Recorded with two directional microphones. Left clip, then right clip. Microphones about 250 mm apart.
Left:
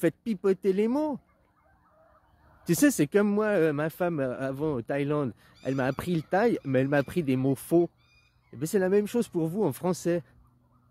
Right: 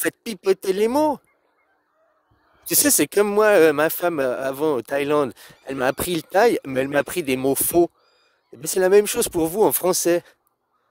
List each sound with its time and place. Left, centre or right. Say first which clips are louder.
0.0 s a man's voice: right 3 dB; right
2.6 s a man's voice: right 4 dB; right